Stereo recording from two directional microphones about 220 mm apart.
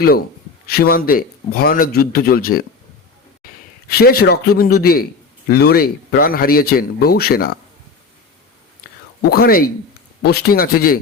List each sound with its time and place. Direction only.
0.7 s speech: 45° left (ahead or behind)
3.8 s speech: 45° left (ahead or behind)
9.2 s speech: 45° left (ahead or behind)